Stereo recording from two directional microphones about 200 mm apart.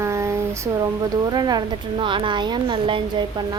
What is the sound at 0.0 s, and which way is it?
A woman's voice, 15° right (ahead or behind).